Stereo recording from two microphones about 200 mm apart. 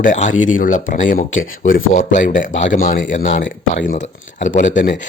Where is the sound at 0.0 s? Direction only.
40° left (ahead or behind).